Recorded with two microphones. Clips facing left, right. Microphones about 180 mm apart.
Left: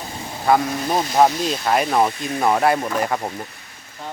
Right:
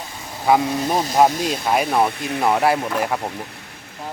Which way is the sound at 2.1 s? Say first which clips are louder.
Even; 65° right (ahead or behind).